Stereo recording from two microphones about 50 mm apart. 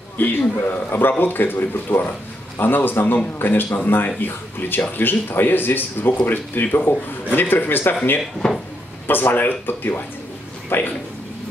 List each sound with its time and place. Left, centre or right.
0.2 s speech: left
8.4 s speech: centre
9.0 s speech: left